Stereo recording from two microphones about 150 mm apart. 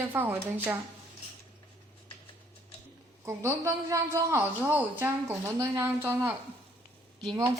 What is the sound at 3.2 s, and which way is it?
A woman's voice, 20° right (ahead or behind).